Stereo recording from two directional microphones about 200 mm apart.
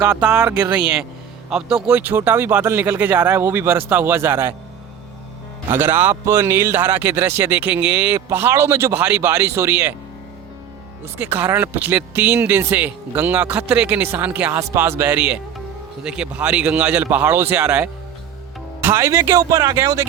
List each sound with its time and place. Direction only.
0.0 s speech: 5° right (ahead or behind)
1.5 s a man's voice: 5° right (ahead or behind)
5.7 s a man's voice: 10° right (ahead or behind)
11.3 s a man's voice: 10° right (ahead or behind)